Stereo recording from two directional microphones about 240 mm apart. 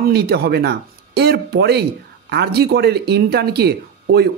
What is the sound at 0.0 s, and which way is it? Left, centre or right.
Speech, right.